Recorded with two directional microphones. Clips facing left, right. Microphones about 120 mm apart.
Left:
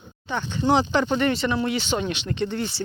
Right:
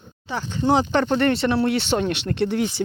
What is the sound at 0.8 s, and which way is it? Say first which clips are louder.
Speech: right 1 dB; 50° right (ahead or behind).